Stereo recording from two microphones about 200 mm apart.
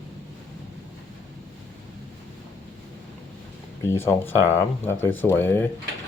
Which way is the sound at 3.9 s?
10° left (ahead or behind).